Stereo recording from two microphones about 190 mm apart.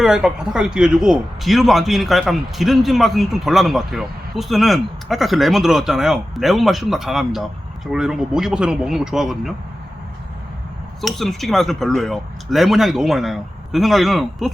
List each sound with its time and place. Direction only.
0.0 s speech: 5° right (ahead or behind)
11.0 s speech: centre (ahead or behind)